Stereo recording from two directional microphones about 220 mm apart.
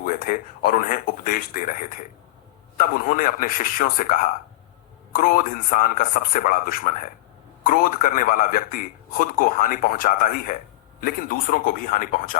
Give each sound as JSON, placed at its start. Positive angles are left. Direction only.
{"t": 0.0, "sound": "speech", "side_deg": 40}
{"t": 2.7, "sound": "speech", "side_deg": 35}